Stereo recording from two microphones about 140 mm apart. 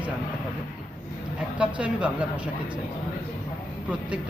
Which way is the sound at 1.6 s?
10° right (ahead or behind).